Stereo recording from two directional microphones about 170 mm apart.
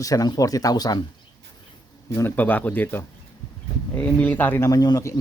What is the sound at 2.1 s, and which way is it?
A man's voice, 10° left (ahead or behind).